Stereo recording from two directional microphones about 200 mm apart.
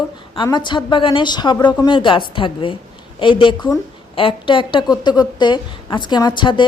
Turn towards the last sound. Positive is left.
turn(degrees=25)  # may be behind; listen again after turning